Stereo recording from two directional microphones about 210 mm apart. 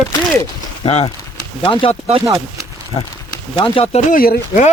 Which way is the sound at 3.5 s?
25° left (ahead or behind).